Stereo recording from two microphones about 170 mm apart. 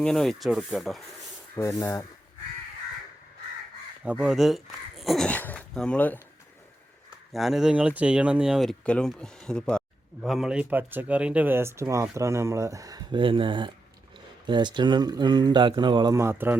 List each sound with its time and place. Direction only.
0.0 s speech: centre (ahead or behind)
1.5 s speech: 15° left (ahead or behind)
4.2 s speech: centre (ahead or behind)
7.3 s speech: centre (ahead or behind)